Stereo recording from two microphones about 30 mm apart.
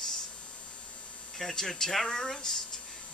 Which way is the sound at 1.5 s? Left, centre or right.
Centre.